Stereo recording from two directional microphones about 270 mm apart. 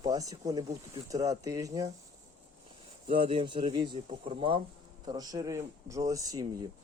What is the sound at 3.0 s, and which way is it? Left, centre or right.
Speech, centre.